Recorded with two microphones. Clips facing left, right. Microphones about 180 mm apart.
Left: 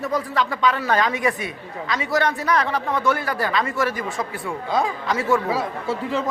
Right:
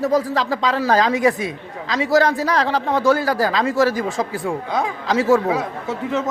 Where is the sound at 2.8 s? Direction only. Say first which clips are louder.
Right 4 dB; 35° right (ahead or behind).